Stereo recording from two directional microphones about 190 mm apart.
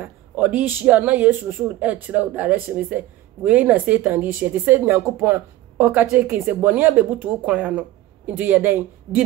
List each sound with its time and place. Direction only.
0.0 s speech: 10° right (ahead or behind)